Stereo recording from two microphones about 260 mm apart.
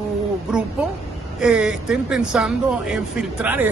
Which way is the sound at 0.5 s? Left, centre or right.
Centre.